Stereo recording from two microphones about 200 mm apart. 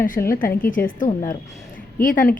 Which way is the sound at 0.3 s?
45° left (ahead or behind).